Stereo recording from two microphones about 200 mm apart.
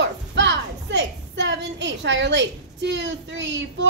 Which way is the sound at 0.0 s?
60° right (ahead or behind).